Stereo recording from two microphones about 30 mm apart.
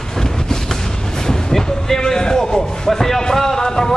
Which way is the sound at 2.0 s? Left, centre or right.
Left.